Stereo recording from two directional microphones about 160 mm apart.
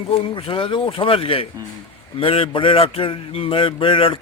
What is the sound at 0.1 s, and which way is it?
A man's voice, 35° left (ahead or behind).